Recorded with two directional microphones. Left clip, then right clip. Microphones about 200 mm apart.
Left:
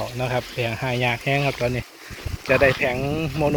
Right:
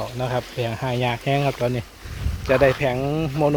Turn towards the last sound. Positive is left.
turn(degrees=-20)  # may be behind; listen again after turning